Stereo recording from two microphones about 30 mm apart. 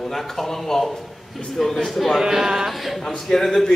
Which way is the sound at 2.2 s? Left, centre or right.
Centre.